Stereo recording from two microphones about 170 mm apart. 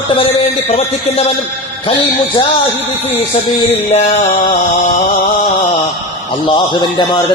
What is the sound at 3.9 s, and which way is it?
Mantra, 45° left (ahead or behind).